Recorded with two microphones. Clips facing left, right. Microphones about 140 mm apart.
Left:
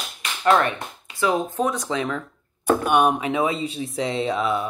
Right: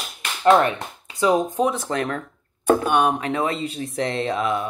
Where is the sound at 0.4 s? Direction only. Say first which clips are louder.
Right 3 dB; 25° right (ahead or behind).